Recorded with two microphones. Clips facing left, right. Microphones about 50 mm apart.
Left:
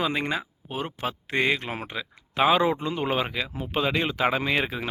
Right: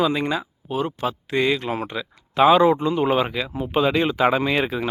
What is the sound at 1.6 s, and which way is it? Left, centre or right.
Speech, centre.